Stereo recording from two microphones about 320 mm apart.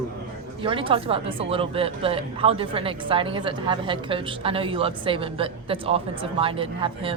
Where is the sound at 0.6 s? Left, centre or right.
Centre.